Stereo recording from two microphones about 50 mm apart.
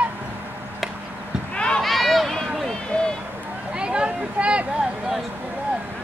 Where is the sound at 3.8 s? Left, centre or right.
Centre.